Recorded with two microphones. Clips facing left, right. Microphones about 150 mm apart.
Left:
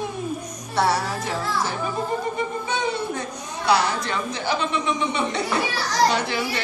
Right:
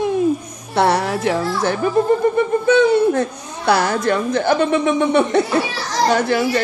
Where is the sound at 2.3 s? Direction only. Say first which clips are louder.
Right 12 dB; 60° right (ahead or behind).